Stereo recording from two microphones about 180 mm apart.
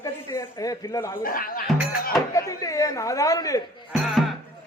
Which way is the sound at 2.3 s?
20° left (ahead or behind).